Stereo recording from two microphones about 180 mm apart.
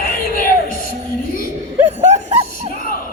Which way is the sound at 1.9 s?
40° right (ahead or behind).